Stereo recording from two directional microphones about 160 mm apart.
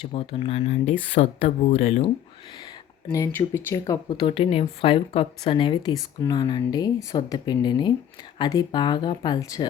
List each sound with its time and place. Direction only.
0.0 s speech: 35° left (ahead or behind)
3.1 s speech: 15° left (ahead or behind)